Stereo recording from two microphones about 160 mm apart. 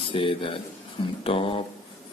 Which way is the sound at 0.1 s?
35° left (ahead or behind).